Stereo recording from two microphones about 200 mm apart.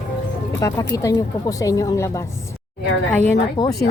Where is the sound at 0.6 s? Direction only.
15° left (ahead or behind).